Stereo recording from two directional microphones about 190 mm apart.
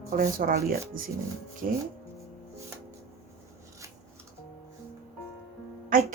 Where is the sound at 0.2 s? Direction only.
50° right (ahead or behind).